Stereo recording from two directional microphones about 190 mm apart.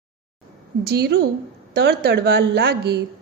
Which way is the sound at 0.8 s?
60° right (ahead or behind).